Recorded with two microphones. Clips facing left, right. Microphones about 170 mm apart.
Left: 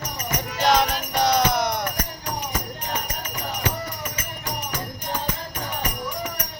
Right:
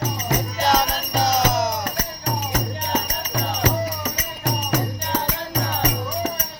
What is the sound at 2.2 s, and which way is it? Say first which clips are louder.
Music: right 7 dB; 45° right (ahead or behind).